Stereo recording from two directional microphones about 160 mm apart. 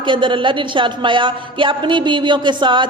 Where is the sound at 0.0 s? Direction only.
30° right (ahead or behind).